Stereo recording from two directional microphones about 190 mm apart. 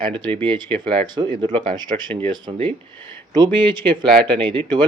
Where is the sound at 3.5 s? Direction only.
25° right (ahead or behind).